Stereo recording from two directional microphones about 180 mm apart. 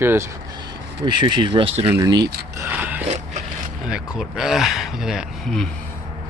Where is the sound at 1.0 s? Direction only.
25° right (ahead or behind).